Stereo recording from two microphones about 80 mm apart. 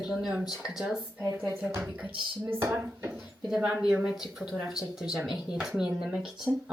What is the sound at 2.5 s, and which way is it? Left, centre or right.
Speech, right.